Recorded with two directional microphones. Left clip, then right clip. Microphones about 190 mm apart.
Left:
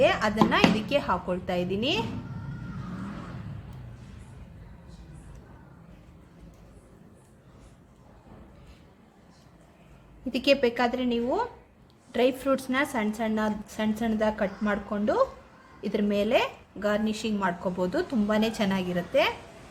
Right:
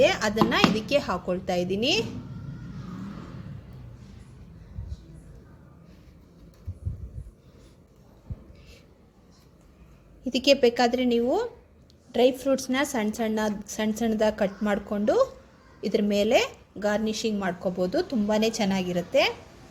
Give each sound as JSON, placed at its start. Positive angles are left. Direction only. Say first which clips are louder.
{"t": 0.0, "sound": "a woman's voice", "louder": "right 1 dB", "side_deg": -20}
{"t": 10.2, "sound": "a woman's voice", "louder": "right 3 dB", "side_deg": -15}
{"t": 12.1, "sound": "a woman's voice", "louder": "right 2 dB", "side_deg": -15}